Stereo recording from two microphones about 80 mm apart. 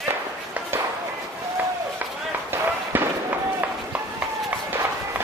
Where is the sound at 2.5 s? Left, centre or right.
Right.